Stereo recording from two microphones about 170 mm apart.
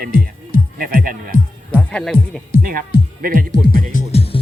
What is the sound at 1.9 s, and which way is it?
Speech, 5° left (ahead or behind).